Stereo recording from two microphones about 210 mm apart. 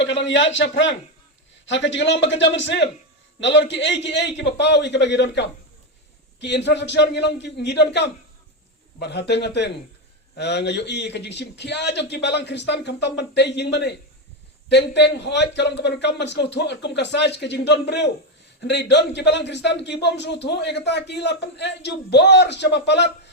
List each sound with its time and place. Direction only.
0.0 s a man's voice: 60° left (ahead or behind)